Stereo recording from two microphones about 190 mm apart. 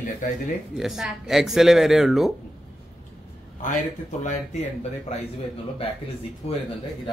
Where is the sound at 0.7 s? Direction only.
Centre (ahead or behind).